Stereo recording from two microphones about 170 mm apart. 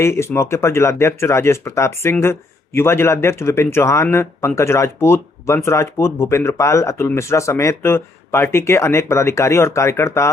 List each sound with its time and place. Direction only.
0.0 s speech: 15° left (ahead or behind)